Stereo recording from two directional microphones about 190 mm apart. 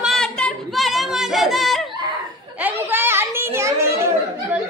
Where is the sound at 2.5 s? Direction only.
10° right (ahead or behind).